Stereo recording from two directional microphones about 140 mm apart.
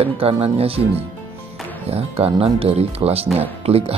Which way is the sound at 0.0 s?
40° right (ahead or behind).